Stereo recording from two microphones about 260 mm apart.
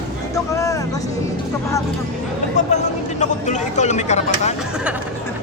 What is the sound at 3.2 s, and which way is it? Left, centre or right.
Speech, left.